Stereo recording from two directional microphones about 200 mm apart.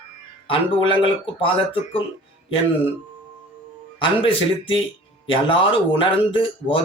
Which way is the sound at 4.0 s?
25° left (ahead or behind).